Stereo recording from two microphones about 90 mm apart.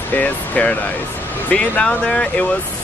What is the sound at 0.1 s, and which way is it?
Speech, 15° left (ahead or behind).